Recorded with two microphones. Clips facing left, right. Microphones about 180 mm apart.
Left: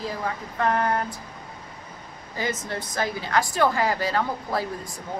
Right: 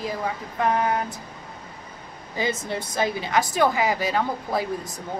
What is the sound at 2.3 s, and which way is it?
Speech, 20° right (ahead or behind).